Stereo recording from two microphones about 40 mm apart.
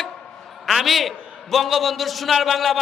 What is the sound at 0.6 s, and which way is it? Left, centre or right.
A man's voice, centre.